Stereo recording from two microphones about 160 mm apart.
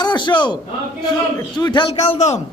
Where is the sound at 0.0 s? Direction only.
30° left (ahead or behind).